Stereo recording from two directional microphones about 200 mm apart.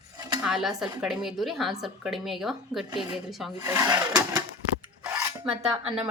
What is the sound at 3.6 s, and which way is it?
Sewing machine, 15° right (ahead or behind).